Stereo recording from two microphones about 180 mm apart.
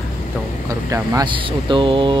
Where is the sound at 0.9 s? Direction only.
20° right (ahead or behind).